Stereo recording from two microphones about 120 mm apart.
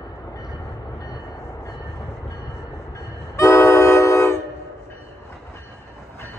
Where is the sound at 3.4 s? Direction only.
25° left (ahead or behind).